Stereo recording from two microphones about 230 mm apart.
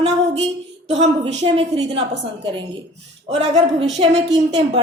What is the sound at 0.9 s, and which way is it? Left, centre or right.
Speech, right.